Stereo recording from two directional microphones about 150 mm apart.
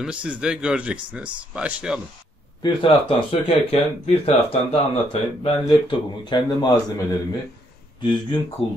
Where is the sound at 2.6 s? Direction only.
35° left (ahead or behind).